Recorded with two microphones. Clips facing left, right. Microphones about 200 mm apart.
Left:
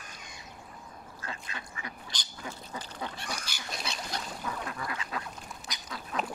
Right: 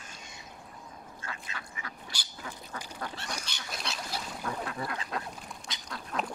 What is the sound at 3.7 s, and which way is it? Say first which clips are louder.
Duck: even; centre (ahead or behind).